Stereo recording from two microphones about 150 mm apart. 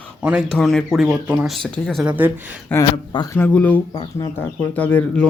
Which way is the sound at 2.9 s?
30° left (ahead or behind).